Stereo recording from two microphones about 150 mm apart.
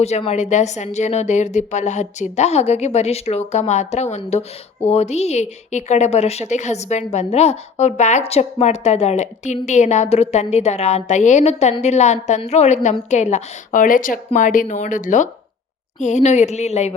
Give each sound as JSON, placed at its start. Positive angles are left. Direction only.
{"t": 0.0, "sound": "a woman's voice", "side_deg": 45}